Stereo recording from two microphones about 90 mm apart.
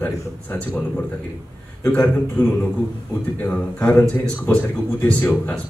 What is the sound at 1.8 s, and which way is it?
Speech, 15° left (ahead or behind).